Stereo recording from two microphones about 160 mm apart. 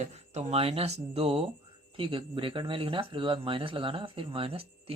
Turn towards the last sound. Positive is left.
turn(degrees=-35)  # may be behind; listen again after turning